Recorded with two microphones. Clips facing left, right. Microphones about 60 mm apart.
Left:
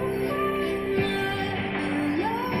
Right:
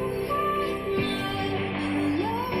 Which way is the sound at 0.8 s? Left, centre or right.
Left.